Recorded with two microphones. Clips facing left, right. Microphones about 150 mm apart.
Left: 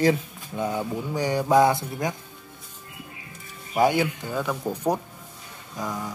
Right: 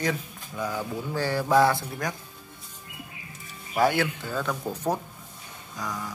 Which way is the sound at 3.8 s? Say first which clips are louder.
Left 2 dB; 15° left (ahead or behind).